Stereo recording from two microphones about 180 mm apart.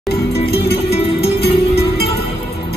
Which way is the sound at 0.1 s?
60° left (ahead or behind).